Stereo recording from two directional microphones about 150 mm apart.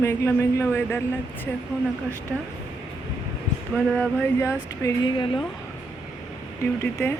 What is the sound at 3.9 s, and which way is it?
Speech, 15° left (ahead or behind).